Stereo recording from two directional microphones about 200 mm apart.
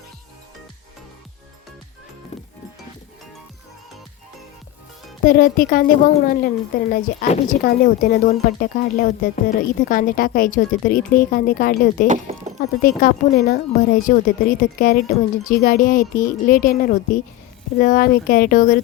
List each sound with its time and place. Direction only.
5.2 s speech: 45° left (ahead or behind)
12.0 s a sound: 35° right (ahead or behind)
12.8 s speech: 45° left (ahead or behind)